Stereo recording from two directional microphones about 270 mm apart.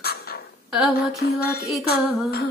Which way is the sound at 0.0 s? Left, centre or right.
Left.